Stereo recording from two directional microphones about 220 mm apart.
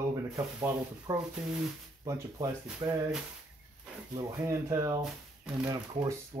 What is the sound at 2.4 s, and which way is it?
Speech, 15° right (ahead or behind).